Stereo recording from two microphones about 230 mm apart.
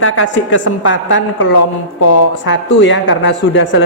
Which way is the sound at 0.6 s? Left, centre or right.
Left.